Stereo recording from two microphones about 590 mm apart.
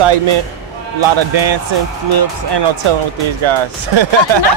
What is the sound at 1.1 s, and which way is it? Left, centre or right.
Speech, right.